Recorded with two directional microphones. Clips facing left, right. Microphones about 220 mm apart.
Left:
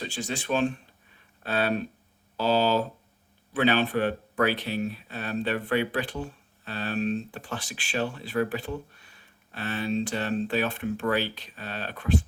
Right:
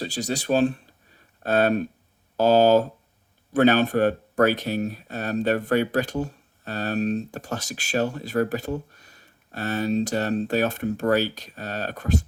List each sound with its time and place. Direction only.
0.0 s speech: 40° right (ahead or behind)